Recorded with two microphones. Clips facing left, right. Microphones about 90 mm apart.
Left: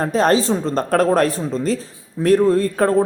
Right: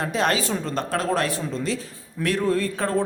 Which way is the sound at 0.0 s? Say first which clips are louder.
Left 7 dB; 40° left (ahead or behind).